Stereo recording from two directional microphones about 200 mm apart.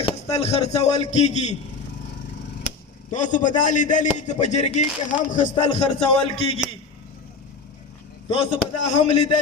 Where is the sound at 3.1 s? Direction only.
40° left (ahead or behind).